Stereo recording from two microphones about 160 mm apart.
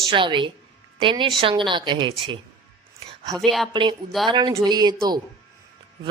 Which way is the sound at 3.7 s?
30° right (ahead or behind).